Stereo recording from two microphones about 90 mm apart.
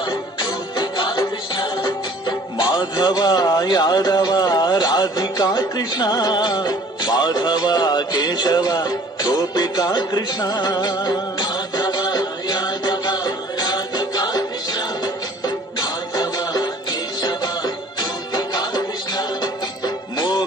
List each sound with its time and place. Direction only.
0.4 s music: 55° left (ahead or behind)
2.2 s speech: 55° left (ahead or behind)
15.4 s music: 45° left (ahead or behind)